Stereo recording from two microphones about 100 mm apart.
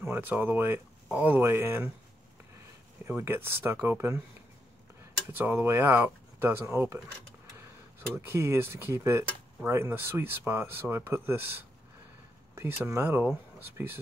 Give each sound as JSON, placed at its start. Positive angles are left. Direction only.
{"t": 0.1, "sound": "speech", "side_deg": -20}
{"t": 3.1, "sound": "speech", "side_deg": -20}
{"t": 5.3, "sound": "speech", "side_deg": -20}
{"t": 8.3, "sound": "speech", "side_deg": -25}
{"t": 12.5, "sound": "speech", "side_deg": -25}